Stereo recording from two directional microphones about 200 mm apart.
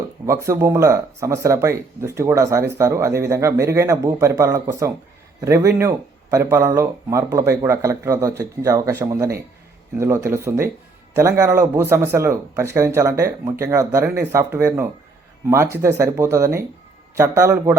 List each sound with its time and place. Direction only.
0.3 s speech: 15° right (ahead or behind)